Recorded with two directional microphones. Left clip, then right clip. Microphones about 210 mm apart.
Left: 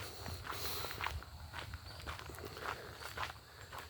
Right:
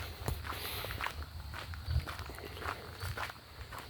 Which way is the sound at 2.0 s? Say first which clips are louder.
Right 1 dB; 55° right (ahead or behind).